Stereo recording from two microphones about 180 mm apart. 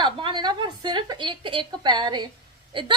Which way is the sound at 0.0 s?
25° right (ahead or behind).